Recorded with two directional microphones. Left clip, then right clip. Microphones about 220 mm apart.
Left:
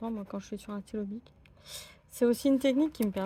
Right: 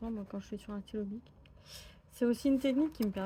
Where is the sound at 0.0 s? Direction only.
35° left (ahead or behind).